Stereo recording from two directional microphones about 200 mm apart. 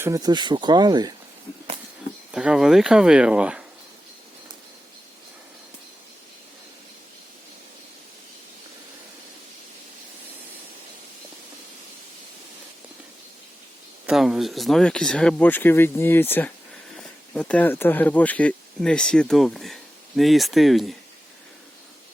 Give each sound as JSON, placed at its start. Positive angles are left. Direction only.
{"t": 0.0, "sound": "speech", "side_deg": -15}
{"t": 2.3, "sound": "speech", "side_deg": -5}
{"t": 14.1, "sound": "speech", "side_deg": 0}